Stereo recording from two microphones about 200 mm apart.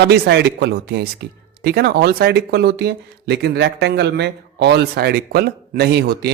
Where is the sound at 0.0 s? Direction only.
55° right (ahead or behind).